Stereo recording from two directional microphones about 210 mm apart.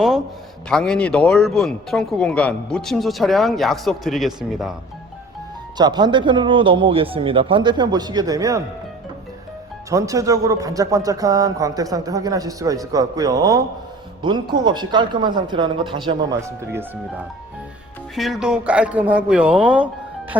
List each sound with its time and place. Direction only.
0.7 s speech: 5° left (ahead or behind)
5.7 s speech: 20° right (ahead or behind)
9.9 s a man's voice: 15° right (ahead or behind)
18.1 s speech: centre (ahead or behind)